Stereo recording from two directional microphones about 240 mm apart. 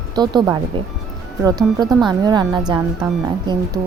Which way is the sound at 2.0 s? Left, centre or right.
Centre.